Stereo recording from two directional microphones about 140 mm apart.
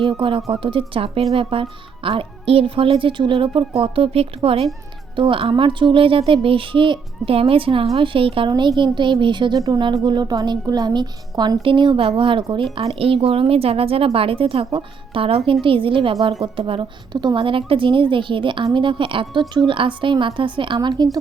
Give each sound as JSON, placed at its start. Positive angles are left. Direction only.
{"t": 0.0, "sound": "a woman's voice", "side_deg": -40}